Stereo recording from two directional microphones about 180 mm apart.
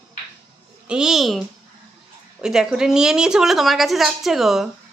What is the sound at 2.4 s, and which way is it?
A woman's voice, 5° right (ahead or behind).